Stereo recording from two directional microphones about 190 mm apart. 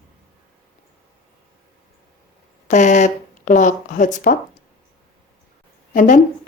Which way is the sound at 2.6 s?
40° left (ahead or behind).